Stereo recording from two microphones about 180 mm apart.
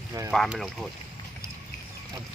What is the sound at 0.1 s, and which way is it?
Speech, 15° right (ahead or behind).